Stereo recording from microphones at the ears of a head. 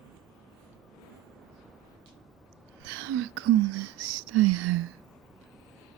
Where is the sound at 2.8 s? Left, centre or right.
Right.